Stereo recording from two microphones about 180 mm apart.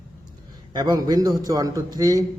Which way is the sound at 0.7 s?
20° right (ahead or behind).